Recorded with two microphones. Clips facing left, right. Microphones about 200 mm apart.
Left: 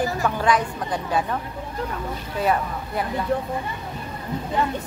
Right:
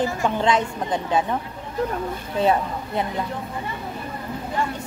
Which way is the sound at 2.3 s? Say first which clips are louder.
Right 3 dB; 25° right (ahead or behind).